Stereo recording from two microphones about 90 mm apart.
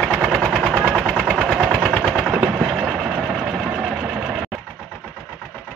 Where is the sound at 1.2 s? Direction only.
5° right (ahead or behind).